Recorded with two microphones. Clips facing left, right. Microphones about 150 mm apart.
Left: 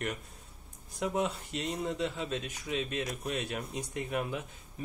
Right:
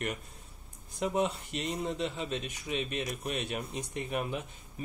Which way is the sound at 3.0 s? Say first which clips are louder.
Even; 10° right (ahead or behind).